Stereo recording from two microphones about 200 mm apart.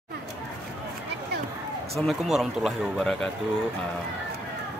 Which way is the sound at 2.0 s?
Centre (ahead or behind).